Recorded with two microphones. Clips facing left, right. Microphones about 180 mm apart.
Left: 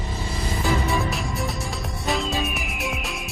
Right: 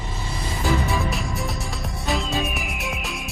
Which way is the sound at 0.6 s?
Centre (ahead or behind).